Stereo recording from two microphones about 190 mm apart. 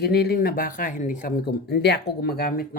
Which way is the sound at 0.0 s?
55° left (ahead or behind).